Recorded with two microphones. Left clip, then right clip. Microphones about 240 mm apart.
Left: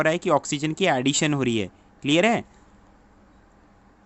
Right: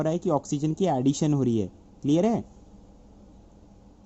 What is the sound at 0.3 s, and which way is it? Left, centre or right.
Speech, left.